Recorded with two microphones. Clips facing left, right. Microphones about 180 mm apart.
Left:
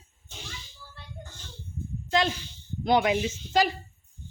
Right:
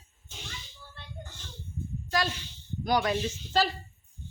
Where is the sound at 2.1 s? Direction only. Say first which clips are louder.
Left 5 dB; 20° left (ahead or behind).